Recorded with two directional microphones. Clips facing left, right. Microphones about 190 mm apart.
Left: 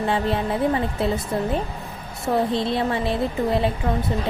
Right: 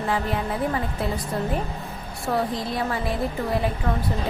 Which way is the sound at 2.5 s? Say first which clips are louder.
Left 4 dB; 25° left (ahead or behind).